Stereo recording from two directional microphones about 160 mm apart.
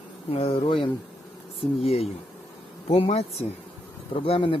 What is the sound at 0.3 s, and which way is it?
Speech, 40° left (ahead or behind).